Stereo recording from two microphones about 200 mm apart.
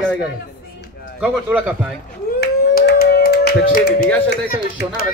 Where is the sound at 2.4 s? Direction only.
50° left (ahead or behind).